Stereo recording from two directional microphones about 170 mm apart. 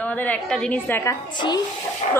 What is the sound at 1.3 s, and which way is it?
Speech, 25° left (ahead or behind).